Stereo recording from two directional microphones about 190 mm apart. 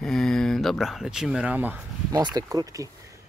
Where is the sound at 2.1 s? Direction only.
20° right (ahead or behind).